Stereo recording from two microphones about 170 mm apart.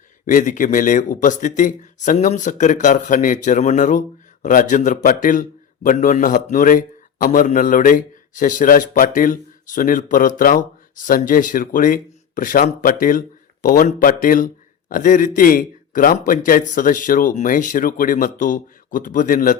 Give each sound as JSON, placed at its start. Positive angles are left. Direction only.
{"t": 0.3, "sound": "a man's voice", "side_deg": 50}